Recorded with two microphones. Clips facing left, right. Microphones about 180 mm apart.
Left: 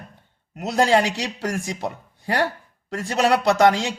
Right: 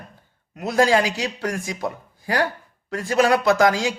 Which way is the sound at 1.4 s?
30° left (ahead or behind).